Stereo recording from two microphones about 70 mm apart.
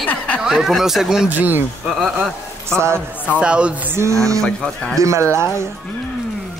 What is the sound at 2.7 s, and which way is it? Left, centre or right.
Speech, right.